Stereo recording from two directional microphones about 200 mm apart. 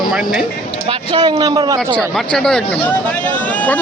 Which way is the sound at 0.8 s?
25° right (ahead or behind).